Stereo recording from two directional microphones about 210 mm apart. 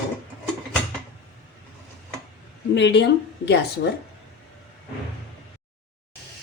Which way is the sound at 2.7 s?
55° left (ahead or behind).